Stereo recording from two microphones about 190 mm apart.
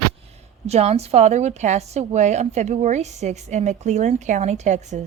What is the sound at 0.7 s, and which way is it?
A woman's voice, 35° right (ahead or behind).